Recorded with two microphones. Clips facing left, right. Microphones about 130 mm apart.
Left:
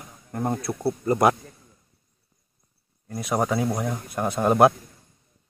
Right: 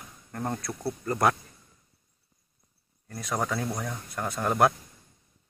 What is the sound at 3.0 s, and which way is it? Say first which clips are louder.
Speech: left 6 dB; 15° left (ahead or behind).